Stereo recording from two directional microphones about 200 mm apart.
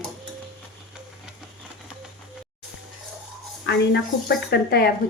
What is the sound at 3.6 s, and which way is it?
A woman's voice, 60° left (ahead or behind).